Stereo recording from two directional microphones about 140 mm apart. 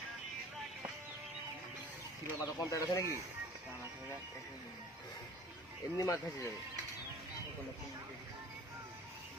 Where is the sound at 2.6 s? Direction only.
25° left (ahead or behind).